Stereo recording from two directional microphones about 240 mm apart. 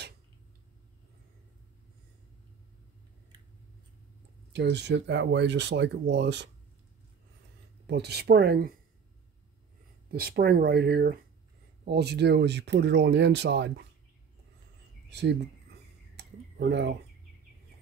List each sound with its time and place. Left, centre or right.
4.5 s speech: right
7.8 s speech: right
10.1 s speech: right
15.0 s speech: right
16.2 s a sound: right